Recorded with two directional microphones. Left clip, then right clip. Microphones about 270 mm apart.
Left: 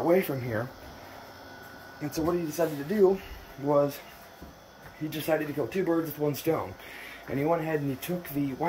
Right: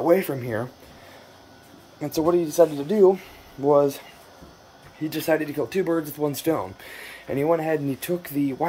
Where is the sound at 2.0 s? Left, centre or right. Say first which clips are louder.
Right 8 dB; right.